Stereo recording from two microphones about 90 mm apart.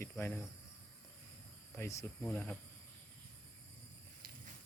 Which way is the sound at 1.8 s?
30° left (ahead or behind).